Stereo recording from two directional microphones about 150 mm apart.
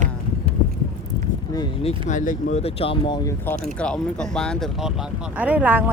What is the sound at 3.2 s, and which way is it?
Speech, 15° left (ahead or behind).